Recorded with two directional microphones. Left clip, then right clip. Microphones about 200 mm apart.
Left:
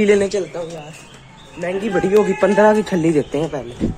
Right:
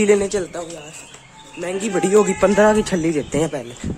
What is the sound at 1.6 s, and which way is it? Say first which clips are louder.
Speech: left 2 dB; 15° right (ahead or behind).